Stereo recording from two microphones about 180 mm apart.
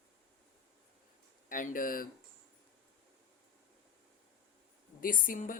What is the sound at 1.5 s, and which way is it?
Speech, 50° left (ahead or behind).